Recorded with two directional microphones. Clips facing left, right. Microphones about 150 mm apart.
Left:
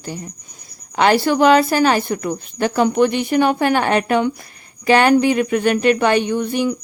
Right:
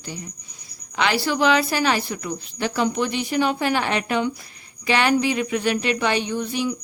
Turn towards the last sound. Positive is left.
turn(degrees=55)  # may be behind; listen again after turning